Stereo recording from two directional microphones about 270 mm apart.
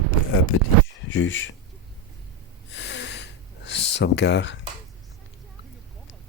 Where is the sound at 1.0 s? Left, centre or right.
Left.